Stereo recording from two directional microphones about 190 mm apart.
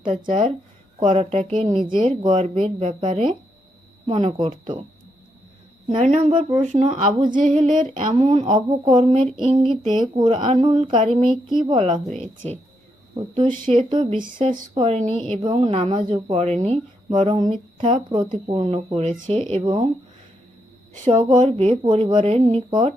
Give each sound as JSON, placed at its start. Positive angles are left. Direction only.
{"t": 0.0, "sound": "speech", "side_deg": -25}
{"t": 5.9, "sound": "speech", "side_deg": -35}
{"t": 6.9, "sound": "speech", "side_deg": -25}
{"t": 7.3, "sound": "a sound", "side_deg": -45}
{"t": 7.9, "sound": "speech", "side_deg": -30}
{"t": 11.0, "sound": "speech", "side_deg": -40}
{"t": 11.5, "sound": "speech", "side_deg": -25}
{"t": 12.0, "sound": "speech", "side_deg": -35}
{"t": 13.7, "sound": "speech", "side_deg": -25}
{"t": 17.1, "sound": "speech", "side_deg": -25}
{"t": 21.3, "sound": "speech", "side_deg": -35}